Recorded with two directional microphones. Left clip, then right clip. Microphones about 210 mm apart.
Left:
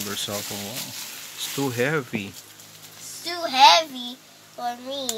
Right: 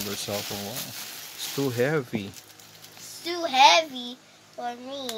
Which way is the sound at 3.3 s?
30° right (ahead or behind).